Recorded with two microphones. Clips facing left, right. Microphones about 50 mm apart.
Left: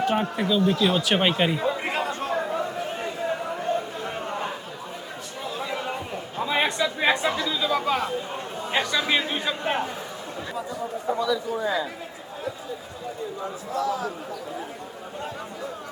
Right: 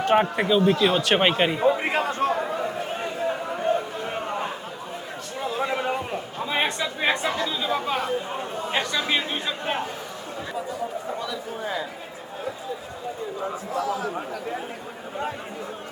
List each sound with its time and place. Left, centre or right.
0.1 s a man's voice: right
0.8 s a man's voice: centre
2.3 s a sound: centre
3.6 s a sound: right
6.7 s speech: centre
11.5 s a man's voice: left
13.4 s a man's voice: right